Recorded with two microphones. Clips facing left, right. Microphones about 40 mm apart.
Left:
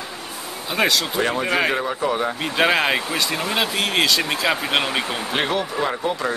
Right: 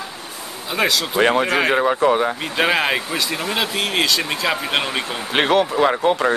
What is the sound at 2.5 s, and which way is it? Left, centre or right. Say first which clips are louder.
Speech: left 1 dB; centre.